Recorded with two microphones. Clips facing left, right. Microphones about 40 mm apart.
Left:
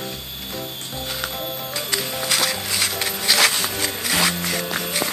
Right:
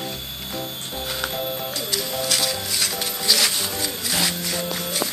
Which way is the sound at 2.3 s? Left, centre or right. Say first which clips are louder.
Left 3 dB; centre.